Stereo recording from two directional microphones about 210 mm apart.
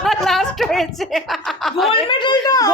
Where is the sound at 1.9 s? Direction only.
20° left (ahead or behind).